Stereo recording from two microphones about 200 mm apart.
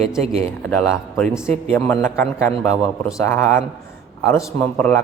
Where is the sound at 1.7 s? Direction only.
10° left (ahead or behind).